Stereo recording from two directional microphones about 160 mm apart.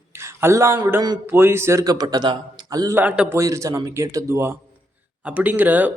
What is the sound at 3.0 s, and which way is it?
Speech, 10° right (ahead or behind).